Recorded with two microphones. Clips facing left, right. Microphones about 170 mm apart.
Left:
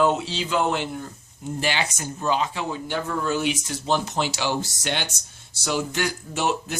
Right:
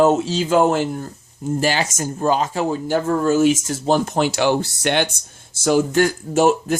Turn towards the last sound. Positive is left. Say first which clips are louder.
# right 9 dB
turn(degrees=-45)  # may be behind; listen again after turning